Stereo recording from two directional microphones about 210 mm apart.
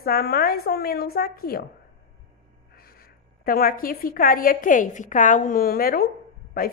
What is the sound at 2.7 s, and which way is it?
A woman's voice, 45° left (ahead or behind).